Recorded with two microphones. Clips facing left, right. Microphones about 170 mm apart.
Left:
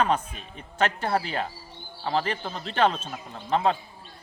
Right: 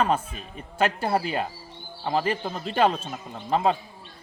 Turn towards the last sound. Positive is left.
turn(degrees=-5)  # may be behind; listen again after turning